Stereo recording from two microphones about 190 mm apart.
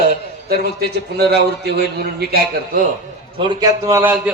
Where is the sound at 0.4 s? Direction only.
55° right (ahead or behind).